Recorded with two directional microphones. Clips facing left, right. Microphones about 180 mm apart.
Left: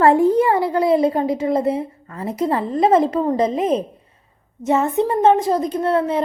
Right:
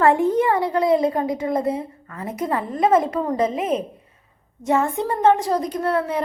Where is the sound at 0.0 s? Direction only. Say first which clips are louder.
Left 3 dB; 35° left (ahead or behind).